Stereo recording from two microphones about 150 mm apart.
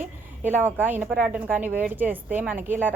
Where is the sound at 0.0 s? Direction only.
15° right (ahead or behind).